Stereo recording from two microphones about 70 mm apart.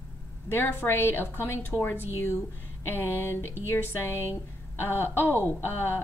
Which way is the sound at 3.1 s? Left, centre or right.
Left.